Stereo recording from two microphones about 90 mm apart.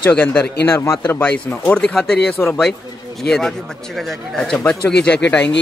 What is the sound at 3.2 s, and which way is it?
A man's voice, 5° left (ahead or behind).